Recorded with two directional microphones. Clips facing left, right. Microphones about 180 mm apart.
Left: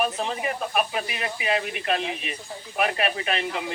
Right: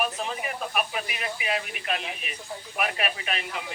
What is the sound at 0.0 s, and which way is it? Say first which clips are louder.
Speech: left 4 dB; 35° left (ahead or behind).